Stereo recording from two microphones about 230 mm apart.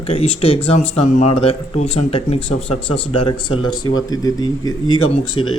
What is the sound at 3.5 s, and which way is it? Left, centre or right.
Speech, left.